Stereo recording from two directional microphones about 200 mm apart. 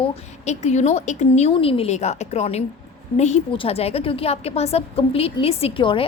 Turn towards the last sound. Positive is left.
turn(degrees=25)  # may be behind; listen again after turning